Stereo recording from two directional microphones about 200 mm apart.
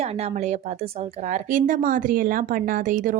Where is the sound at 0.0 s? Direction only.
30° right (ahead or behind).